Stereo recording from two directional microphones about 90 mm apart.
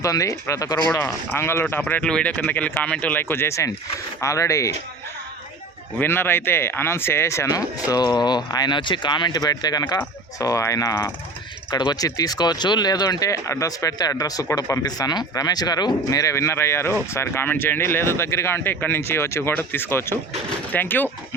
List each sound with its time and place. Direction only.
0.0 s speech: 40° left (ahead or behind)
1.3 s speech: 30° left (ahead or behind)
6.0 s speech: 25° left (ahead or behind)
7.9 s speech: 50° left (ahead or behind)
11.7 s speech: 50° left (ahead or behind); by 21.1 s 20° left (ahead or behind)